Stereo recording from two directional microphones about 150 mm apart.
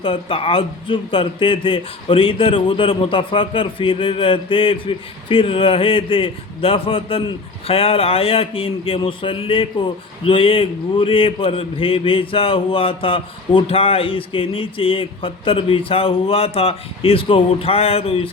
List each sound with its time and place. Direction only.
0.0 s a man's voice: 35° left (ahead or behind)